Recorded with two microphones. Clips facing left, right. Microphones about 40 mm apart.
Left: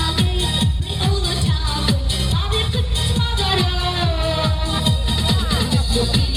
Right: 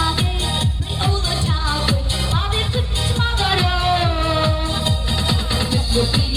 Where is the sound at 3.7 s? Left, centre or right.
Centre.